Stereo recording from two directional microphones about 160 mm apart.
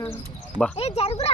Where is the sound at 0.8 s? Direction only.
40° left (ahead or behind).